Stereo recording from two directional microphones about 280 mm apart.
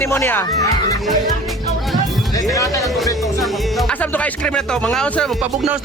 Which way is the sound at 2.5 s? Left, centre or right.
Centre.